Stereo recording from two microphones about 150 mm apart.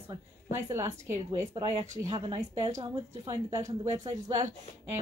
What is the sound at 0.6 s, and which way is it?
A woman's voice, 20° right (ahead or behind).